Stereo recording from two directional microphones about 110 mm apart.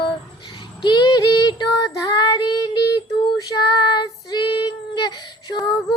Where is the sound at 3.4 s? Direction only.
40° left (ahead or behind).